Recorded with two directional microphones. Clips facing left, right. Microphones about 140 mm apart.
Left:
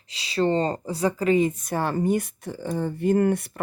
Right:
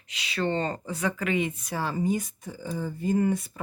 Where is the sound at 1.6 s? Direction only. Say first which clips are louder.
Left 4 dB; 55° left (ahead or behind).